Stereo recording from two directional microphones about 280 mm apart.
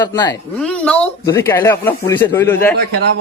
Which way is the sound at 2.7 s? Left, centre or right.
Right.